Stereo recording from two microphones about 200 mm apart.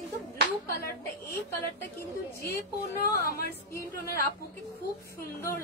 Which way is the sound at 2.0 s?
15° left (ahead or behind).